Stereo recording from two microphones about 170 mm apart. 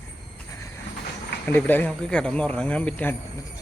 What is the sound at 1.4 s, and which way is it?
Speech, 10° left (ahead or behind).